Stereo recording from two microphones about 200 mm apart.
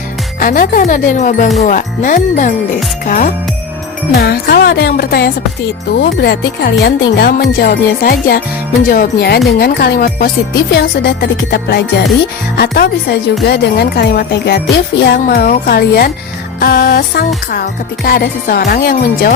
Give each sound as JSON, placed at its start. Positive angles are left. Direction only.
{"t": 0.3, "sound": "music", "side_deg": 45}
{"t": 1.5, "sound": "speech", "side_deg": 40}
{"t": 4.1, "sound": "music", "side_deg": 50}